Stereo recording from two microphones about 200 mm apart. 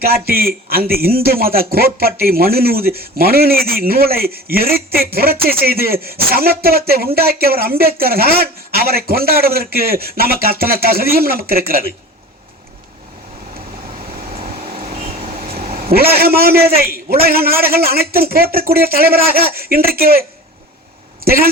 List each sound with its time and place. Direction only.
0.0 s a man's voice: 50° right (ahead or behind)
14.3 s vehicle: 30° right (ahead or behind)
15.7 s a man's voice: 50° right (ahead or behind)